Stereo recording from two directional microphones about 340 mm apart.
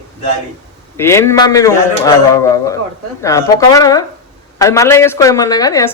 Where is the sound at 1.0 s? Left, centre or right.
Centre.